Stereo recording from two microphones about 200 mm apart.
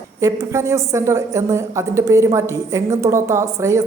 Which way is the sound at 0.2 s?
15° right (ahead or behind).